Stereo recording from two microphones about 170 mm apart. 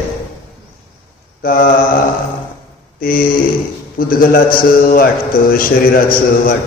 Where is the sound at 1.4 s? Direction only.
55° left (ahead or behind).